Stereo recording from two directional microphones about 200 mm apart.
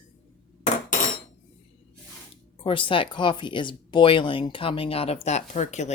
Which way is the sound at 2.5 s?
25° left (ahead or behind).